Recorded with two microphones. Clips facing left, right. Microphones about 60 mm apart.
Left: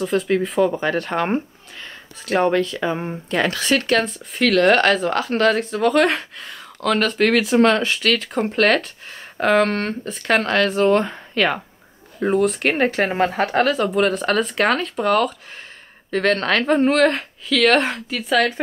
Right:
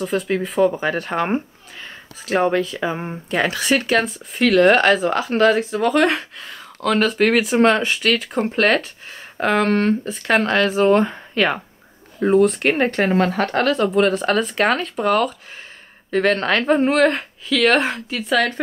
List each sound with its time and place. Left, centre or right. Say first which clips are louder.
0.0 s speech: left 2 dB; centre
13.1 s speech: right 1 dB; centre